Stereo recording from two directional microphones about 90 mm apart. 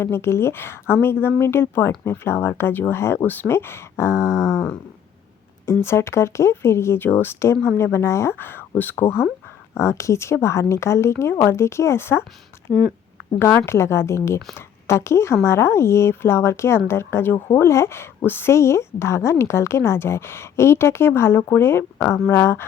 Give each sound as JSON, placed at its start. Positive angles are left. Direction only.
{"t": 0.0, "sound": "speech", "side_deg": 25}
{"t": 5.6, "sound": "a woman's voice", "side_deg": 30}
{"t": 13.4, "sound": "a woman's voice", "side_deg": 25}